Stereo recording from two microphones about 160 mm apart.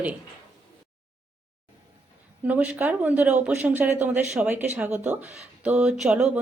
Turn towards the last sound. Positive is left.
turn(degrees=-5)  # may be behind; listen again after turning